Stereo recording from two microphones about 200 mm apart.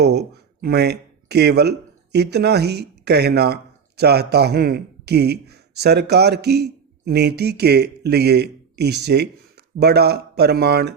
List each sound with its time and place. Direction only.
0.0 s speech: 55° right (ahead or behind)